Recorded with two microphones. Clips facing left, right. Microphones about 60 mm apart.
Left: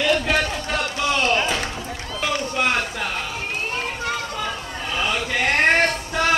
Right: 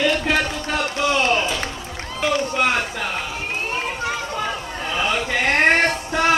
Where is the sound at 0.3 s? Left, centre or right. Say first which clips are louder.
Right 1 dB; centre.